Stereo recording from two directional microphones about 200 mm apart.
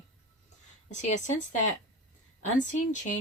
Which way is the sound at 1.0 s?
35° left (ahead or behind).